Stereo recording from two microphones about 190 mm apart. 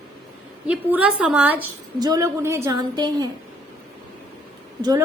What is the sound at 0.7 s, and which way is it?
Speech, 5° right (ahead or behind).